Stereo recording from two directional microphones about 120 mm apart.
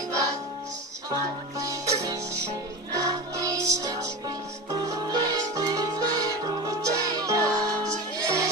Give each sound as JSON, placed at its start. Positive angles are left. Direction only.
{"t": 1.5, "sound": "music", "side_deg": -25}